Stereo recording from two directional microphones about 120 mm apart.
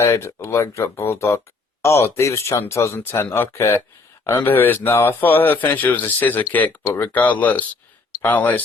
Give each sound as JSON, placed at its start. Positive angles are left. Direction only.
{"t": 0.0, "sound": "a man's voice", "side_deg": 25}